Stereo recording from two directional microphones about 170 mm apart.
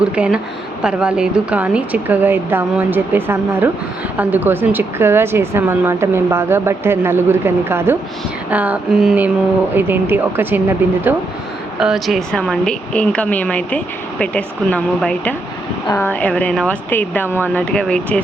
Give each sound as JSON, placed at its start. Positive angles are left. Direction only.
{"t": 0.0, "sound": "a woman's voice", "side_deg": -5}